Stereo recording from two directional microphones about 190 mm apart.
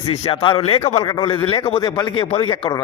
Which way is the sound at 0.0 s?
30° left (ahead or behind).